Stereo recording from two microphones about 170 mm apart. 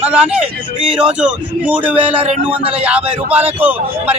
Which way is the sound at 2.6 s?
35° right (ahead or behind).